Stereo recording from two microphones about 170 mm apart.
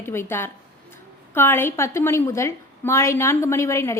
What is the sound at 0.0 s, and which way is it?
A woman's voice, 15° left (ahead or behind).